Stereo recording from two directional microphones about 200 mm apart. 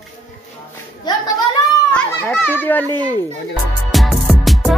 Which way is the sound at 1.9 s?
5° left (ahead or behind).